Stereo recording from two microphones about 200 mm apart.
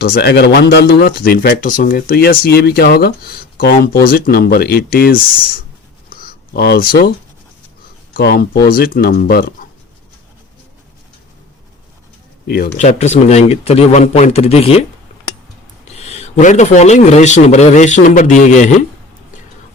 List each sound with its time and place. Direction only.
0.0 s speech: 55° left (ahead or behind)
6.1 s a sound: 50° left (ahead or behind)
8.1 s speech: 50° left (ahead or behind)
12.5 s speech: 50° left (ahead or behind)
12.7 s a man's voice: 35° left (ahead or behind)